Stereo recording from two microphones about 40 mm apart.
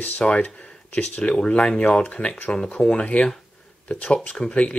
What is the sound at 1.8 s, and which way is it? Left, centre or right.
Speech, left.